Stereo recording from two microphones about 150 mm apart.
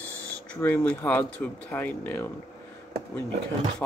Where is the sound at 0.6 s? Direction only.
10° left (ahead or behind).